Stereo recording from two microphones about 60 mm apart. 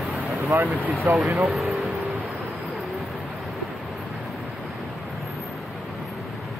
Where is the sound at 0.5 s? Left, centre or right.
Right.